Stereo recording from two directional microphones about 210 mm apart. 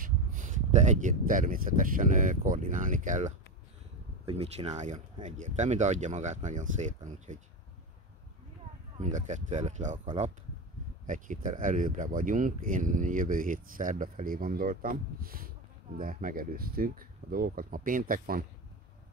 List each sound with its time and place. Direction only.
0.0 s speech: 40° right (ahead or behind)
8.9 s speech: 35° right (ahead or behind)